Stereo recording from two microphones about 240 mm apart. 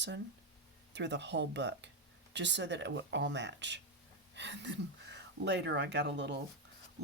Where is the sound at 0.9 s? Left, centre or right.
Right.